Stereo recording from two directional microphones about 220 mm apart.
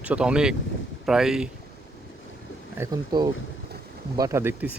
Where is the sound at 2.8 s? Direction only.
15° right (ahead or behind).